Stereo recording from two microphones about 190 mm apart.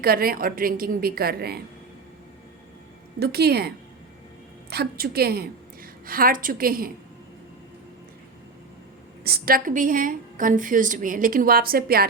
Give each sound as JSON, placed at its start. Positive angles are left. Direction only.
{"t": 0.0, "sound": "a woman's voice", "side_deg": -50}
{"t": 3.2, "sound": "a woman's voice", "side_deg": -55}
{"t": 4.7, "sound": "a woman's voice", "side_deg": -55}
{"t": 9.2, "sound": "a woman's voice", "side_deg": -50}